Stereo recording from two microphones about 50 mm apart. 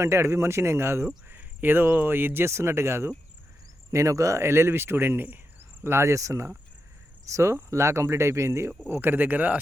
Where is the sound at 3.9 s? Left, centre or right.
Right.